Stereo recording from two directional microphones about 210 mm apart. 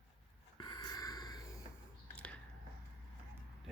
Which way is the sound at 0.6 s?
20° left (ahead or behind).